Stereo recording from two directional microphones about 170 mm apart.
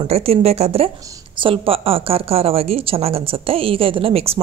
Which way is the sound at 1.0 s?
20° right (ahead or behind).